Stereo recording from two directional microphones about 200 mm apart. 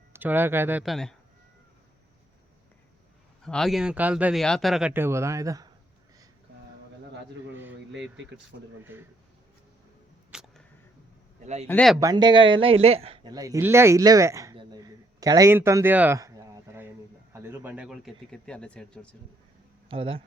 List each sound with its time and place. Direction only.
0.1 s speech: 10° right (ahead or behind)
3.4 s speech: centre (ahead or behind); by 5.7 s 15° right (ahead or behind)
7.5 s a sound: 10° right (ahead or behind)
8.5 s speech: 70° right (ahead or behind)
8.9 s speech: 10° right (ahead or behind)
10.3 s single-lens reflex camera: centre (ahead or behind)
11.7 s speech: 5° left (ahead or behind)
11.9 s a man's voice: 20° right (ahead or behind); by 19.0 s 5° left (ahead or behind)
19.9 s speech: 25° right (ahead or behind)